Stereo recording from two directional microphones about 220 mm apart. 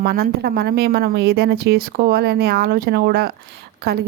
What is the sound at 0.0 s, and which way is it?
A woman's voice, 40° right (ahead or behind).